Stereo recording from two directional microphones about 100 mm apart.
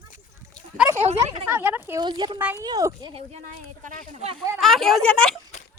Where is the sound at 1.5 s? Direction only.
20° right (ahead or behind).